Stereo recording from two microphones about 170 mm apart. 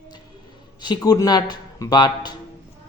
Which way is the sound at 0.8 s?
25° left (ahead or behind).